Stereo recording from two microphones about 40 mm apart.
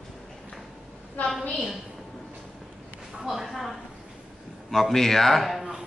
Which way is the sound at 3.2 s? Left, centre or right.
Centre.